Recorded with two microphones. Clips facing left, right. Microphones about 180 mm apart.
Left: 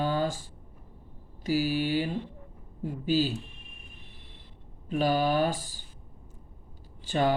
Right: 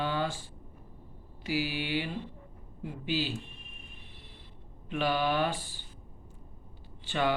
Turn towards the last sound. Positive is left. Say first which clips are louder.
# left 3 dB
turn(degrees=40)  # may be behind; listen again after turning